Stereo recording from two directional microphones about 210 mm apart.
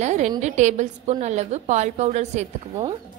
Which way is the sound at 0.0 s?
35° right (ahead or behind).